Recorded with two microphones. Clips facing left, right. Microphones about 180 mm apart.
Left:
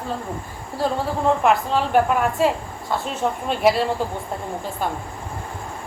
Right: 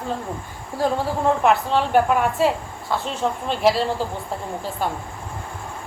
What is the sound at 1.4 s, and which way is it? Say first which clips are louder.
A woman's voice: even; centre (ahead or behind).